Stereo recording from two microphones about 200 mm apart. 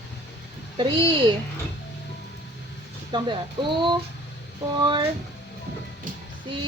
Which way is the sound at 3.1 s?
25° right (ahead or behind).